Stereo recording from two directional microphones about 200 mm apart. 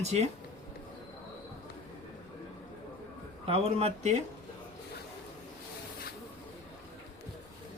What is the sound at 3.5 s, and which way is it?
Speech, 30° right (ahead or behind).